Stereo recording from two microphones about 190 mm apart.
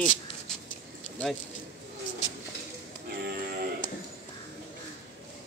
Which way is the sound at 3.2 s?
55° right (ahead or behind).